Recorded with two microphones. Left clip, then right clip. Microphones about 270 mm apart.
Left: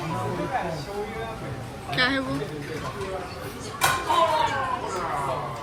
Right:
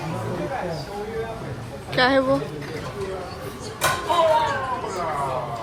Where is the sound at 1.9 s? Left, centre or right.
Centre.